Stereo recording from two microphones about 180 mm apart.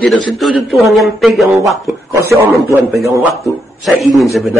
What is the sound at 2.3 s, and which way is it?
Speech, 15° right (ahead or behind).